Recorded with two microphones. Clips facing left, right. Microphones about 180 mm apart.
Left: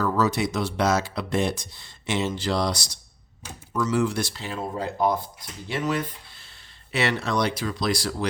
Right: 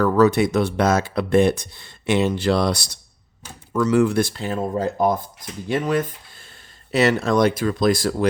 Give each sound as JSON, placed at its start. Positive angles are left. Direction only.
{"t": 0.0, "sound": "speech", "side_deg": -60}